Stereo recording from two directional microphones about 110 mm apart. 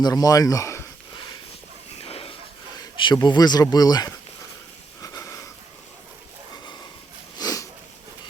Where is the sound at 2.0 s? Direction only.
60° left (ahead or behind).